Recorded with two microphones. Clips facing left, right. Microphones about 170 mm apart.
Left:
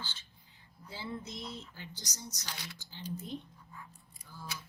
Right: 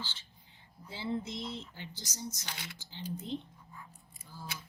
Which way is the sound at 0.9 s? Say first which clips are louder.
Right 5 dB; 25° right (ahead or behind).